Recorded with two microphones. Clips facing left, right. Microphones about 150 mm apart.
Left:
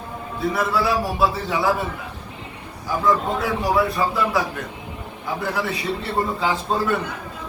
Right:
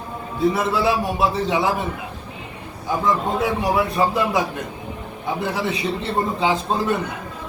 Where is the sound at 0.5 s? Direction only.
20° right (ahead or behind).